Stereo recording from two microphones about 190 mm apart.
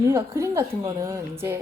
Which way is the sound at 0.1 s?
15° right (ahead or behind).